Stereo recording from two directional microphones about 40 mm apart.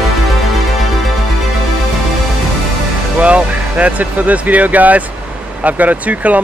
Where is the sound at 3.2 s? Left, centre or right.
Right.